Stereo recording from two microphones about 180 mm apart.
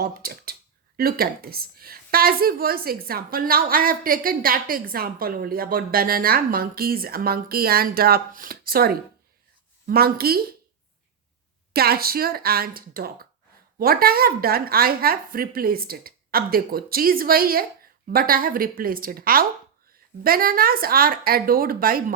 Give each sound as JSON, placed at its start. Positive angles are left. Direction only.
{"t": 0.0, "sound": "a woman's voice", "side_deg": -55}
{"t": 11.7, "sound": "a woman's voice", "side_deg": -60}